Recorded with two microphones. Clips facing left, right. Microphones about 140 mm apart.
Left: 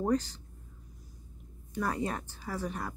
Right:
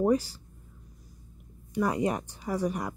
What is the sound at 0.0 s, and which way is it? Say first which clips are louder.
Speech: right 5 dB; 10° right (ahead or behind).